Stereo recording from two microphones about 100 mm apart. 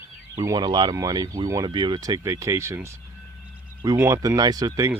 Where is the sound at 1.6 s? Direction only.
50° right (ahead or behind); by 2.9 s 30° right (ahead or behind).